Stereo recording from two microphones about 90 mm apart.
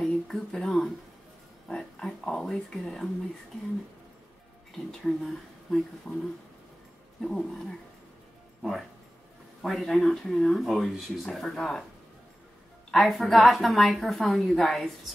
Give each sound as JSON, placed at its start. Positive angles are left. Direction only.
{"t": 0.0, "sound": "speech", "side_deg": 5}
{"t": 5.0, "sound": "speech", "side_deg": 5}
{"t": 7.2, "sound": "speech", "side_deg": 5}
{"t": 9.6, "sound": "speech", "side_deg": 0}
{"t": 12.9, "sound": "speech", "side_deg": 0}